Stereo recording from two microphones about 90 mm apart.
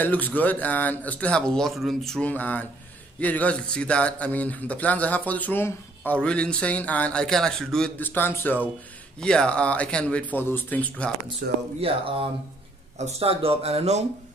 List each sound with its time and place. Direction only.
0.0 s a man's voice: 20° left (ahead or behind); by 2.2 s 5° left (ahead or behind)
2.2 s a man's voice: 15° left (ahead or behind)
6.2 s a man's voice: 10° left (ahead or behind)
8.0 s speech: 25° left (ahead or behind)
9.2 s a man's voice: 10° left (ahead or behind)
11.8 s a man's voice: 90° right